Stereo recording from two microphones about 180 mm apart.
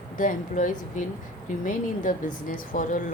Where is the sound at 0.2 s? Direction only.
45° left (ahead or behind).